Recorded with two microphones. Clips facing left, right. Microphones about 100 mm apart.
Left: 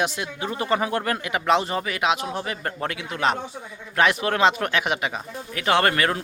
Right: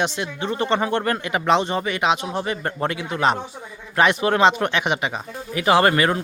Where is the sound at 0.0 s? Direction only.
5° left (ahead or behind).